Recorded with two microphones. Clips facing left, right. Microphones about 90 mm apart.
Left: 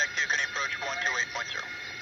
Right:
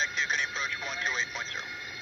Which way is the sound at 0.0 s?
20° left (ahead or behind).